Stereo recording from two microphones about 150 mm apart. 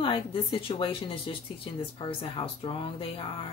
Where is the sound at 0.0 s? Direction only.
35° left (ahead or behind).